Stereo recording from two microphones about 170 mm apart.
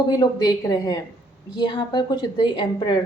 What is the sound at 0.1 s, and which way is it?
A woman's voice, 20° left (ahead or behind).